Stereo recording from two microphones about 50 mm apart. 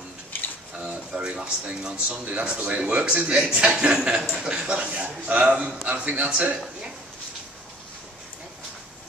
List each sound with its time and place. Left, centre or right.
0.7 s speech: right
2.0 s a man's voice: right
3.4 s a man's voice: centre
5.9 s a man's voice: right